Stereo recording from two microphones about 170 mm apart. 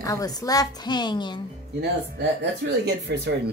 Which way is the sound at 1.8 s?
85° right.